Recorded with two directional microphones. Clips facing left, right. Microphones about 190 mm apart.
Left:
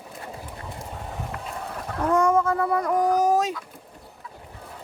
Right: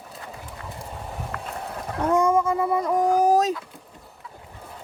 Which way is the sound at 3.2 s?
35° right (ahead or behind).